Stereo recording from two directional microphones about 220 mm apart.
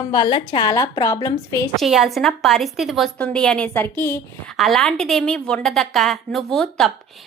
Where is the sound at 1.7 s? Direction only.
Centre (ahead or behind).